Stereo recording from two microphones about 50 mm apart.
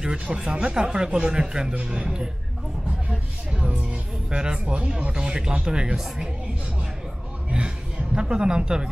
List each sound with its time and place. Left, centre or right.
0.0 s speech: centre
7.5 s a woman's voice: centre